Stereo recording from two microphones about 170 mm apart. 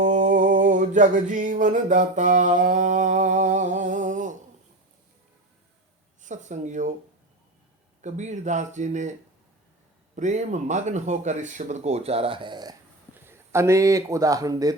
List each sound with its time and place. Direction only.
0.0 s a sound: 45° right (ahead or behind)
6.2 s speech: 45° right (ahead or behind)
8.0 s speech: 45° right (ahead or behind)
10.2 s speech: 45° right (ahead or behind); by 14.8 s 20° right (ahead or behind)